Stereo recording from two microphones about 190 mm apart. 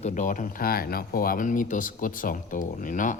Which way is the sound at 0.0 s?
40° left (ahead or behind).